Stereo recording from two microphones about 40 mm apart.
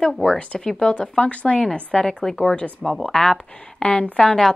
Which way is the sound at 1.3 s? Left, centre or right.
Left.